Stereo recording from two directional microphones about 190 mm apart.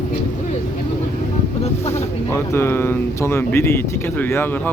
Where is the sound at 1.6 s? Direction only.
35° left (ahead or behind).